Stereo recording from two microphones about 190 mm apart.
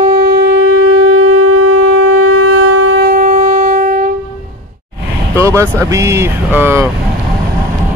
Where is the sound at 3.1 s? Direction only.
40° right (ahead or behind).